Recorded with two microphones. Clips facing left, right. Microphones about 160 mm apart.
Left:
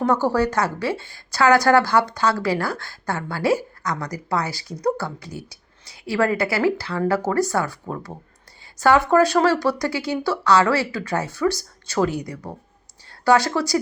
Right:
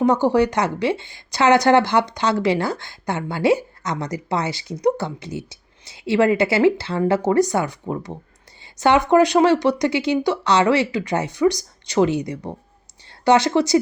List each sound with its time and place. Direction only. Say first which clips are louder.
0.0 s a woman's voice: right 3 dB; 20° right (ahead or behind)